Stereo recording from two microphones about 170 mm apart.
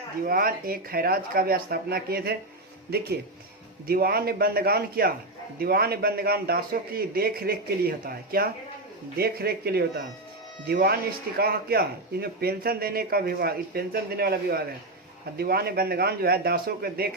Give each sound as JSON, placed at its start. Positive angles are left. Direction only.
{"t": 0.3, "sound": "a man's voice", "side_deg": -60}